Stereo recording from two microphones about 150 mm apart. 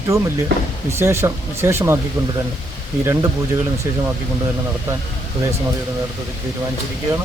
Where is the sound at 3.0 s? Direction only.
15° right (ahead or behind).